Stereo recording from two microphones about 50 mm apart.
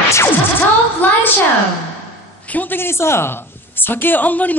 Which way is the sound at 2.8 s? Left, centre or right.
Left.